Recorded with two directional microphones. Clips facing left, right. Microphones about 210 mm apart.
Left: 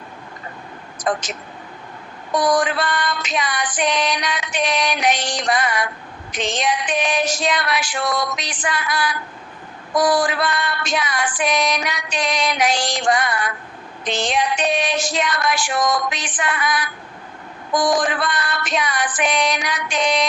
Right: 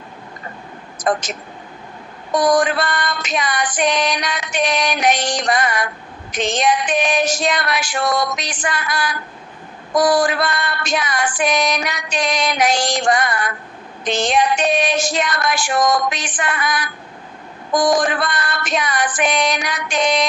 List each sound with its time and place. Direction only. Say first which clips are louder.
0.9 s speech: right 3 dB; 45° right (ahead or behind)
2.3 s female singing: right 3 dB; 45° right (ahead or behind)